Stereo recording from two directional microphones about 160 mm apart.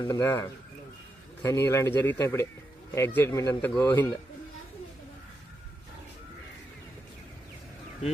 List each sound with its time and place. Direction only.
0.0 s a man's voice: 20° left (ahead or behind)